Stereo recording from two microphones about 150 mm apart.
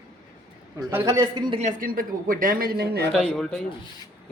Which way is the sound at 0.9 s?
15° right (ahead or behind).